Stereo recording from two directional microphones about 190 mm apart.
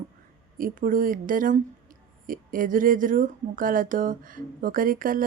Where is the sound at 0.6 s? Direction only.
45° right (ahead or behind).